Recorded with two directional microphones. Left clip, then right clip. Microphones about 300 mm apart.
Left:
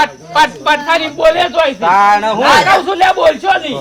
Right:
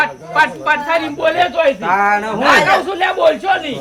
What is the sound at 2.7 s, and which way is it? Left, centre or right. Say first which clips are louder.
Speech: left 4 dB; centre.